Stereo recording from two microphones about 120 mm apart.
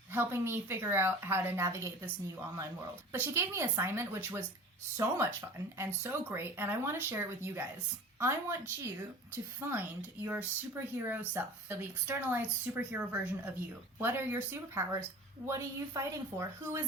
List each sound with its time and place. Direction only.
0.1 s a woman's voice: 20° right (ahead or behind)
3.1 s a woman's voice: 20° right (ahead or behind)
5.7 s a woman's voice: 20° right (ahead or behind)